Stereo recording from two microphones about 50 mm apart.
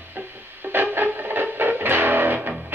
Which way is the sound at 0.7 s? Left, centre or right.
Right.